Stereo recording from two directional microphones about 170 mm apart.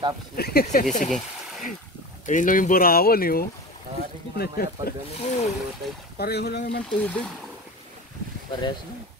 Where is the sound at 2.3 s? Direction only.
50° left (ahead or behind); by 5.0 s 65° left (ahead or behind).